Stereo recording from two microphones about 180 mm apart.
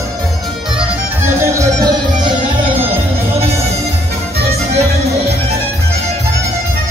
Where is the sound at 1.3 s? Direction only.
15° right (ahead or behind).